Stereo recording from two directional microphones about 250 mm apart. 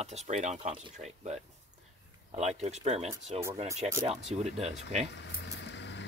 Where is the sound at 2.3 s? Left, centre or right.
Right.